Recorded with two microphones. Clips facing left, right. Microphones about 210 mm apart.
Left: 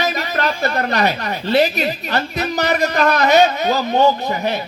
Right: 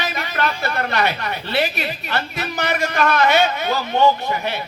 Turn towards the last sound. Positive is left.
turn(degrees=40)  # may be behind; listen again after turning